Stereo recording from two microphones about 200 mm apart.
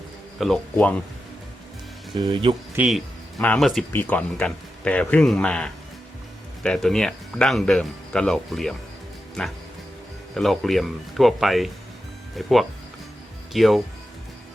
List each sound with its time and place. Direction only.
0.3 s speech: centre (ahead or behind)
2.2 s speech: 25° right (ahead or behind)
2.7 s speech: centre (ahead or behind)
10.3 s speech: centre (ahead or behind)